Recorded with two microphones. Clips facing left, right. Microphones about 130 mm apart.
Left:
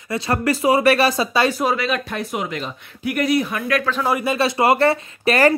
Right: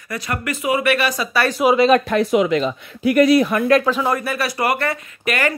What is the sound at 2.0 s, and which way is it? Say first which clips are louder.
Speech: right 9 dB; 90° right.